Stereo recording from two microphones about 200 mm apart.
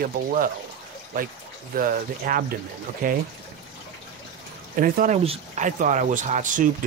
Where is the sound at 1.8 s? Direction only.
45° right (ahead or behind).